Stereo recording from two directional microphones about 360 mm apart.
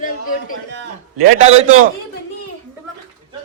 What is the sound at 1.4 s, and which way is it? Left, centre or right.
Speech, centre.